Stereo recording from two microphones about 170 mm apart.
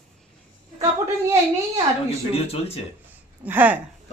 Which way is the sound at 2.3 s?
35° left (ahead or behind).